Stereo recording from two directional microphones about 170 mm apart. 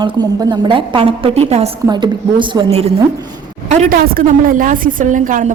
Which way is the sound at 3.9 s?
55° right (ahead or behind).